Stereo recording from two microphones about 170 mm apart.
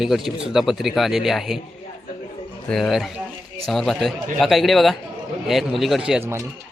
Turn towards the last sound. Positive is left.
turn(degrees=-15)  # may be behind; listen again after turning